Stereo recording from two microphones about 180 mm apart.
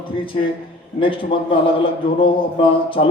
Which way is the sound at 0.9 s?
30° left (ahead or behind).